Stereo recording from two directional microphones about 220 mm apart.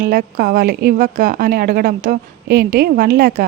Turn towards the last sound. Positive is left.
turn(degrees=-40)  # may be behind; listen again after turning